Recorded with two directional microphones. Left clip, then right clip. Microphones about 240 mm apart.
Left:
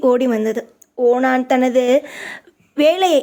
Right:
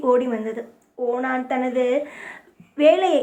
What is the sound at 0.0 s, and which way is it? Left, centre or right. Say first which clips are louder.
Speech: left 5 dB; left.